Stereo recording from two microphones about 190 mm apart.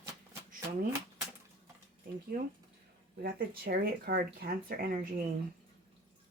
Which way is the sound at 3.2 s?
55° right (ahead or behind).